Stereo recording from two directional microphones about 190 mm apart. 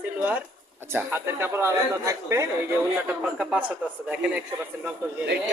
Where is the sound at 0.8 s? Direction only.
10° right (ahead or behind).